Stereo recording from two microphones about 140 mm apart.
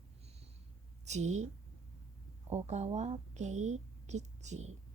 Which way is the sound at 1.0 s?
55° right (ahead or behind).